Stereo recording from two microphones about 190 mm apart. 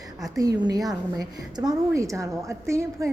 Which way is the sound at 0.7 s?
20° right (ahead or behind).